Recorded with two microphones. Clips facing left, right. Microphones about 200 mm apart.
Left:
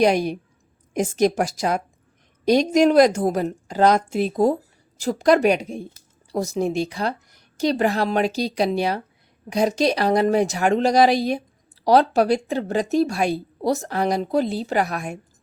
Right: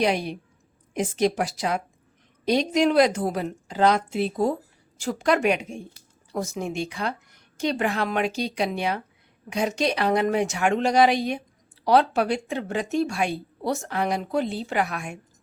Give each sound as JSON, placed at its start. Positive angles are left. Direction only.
{"t": 0.0, "sound": "a woman's voice", "side_deg": 45}